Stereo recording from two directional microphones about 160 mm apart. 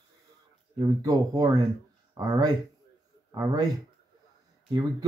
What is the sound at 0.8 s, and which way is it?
Speech, 25° right (ahead or behind).